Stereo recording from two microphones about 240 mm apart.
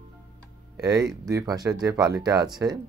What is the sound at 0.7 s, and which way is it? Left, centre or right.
Speech, centre.